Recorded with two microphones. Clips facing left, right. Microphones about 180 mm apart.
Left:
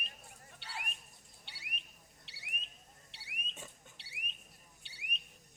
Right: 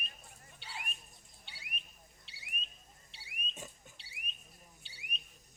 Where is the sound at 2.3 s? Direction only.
70° left (ahead or behind).